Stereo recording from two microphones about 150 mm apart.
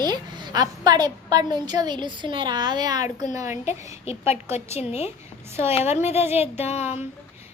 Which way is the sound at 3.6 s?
45° left (ahead or behind).